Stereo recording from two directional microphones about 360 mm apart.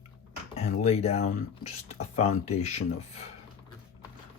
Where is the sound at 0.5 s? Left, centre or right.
Centre.